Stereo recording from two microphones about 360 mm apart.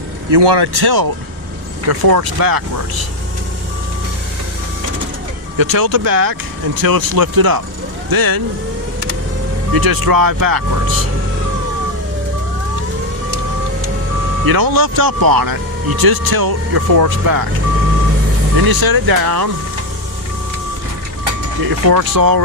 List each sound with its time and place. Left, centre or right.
0.3 s speech: right
1.9 s speech: right
5.5 s speech: right
9.7 s speech: right
14.4 s speech: right
18.5 s speech: right
21.6 s speech: right